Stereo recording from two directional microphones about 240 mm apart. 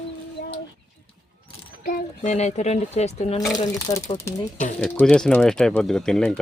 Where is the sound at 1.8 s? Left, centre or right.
Left.